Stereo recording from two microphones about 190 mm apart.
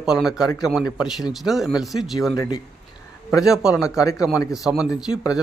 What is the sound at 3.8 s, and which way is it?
Speech, 15° left (ahead or behind).